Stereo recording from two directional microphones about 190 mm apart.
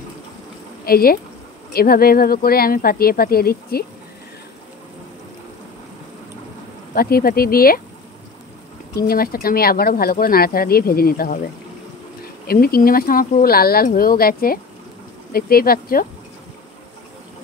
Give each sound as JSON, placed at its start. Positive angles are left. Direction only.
{"t": 0.8, "sound": "speech", "side_deg": 50}
{"t": 6.9, "sound": "speech", "side_deg": 55}
{"t": 8.9, "sound": "speech", "side_deg": 50}
{"t": 12.4, "sound": "speech", "side_deg": 50}